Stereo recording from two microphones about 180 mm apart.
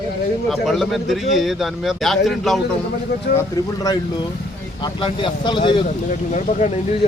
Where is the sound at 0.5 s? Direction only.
Centre (ahead or behind).